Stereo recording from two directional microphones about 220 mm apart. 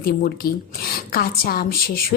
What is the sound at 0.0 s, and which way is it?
A woman's voice, 40° left (ahead or behind).